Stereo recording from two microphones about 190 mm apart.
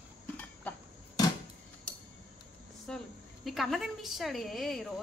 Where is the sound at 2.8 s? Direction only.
Centre (ahead or behind).